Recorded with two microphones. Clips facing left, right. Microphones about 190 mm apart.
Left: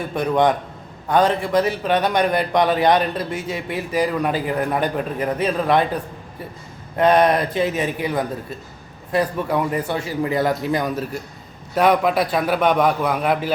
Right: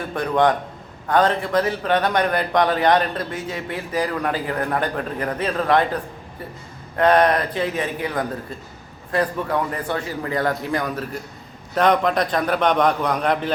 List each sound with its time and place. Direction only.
0.1 s a man's voice: 15° left (ahead or behind)
6.9 s a man's voice: 15° left (ahead or behind)